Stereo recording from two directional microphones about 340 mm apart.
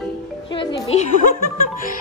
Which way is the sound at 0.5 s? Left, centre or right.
Centre.